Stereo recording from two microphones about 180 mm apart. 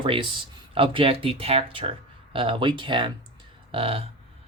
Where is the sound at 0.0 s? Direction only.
30° right (ahead or behind).